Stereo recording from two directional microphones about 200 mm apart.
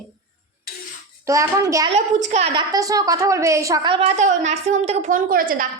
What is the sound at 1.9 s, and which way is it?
A woman's voice, 35° right (ahead or behind).